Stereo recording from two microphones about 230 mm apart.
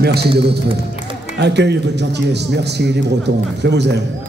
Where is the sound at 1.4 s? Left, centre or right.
Right.